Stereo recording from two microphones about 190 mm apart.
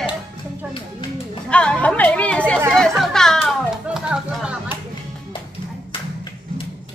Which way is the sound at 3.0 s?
Centre (ahead or behind).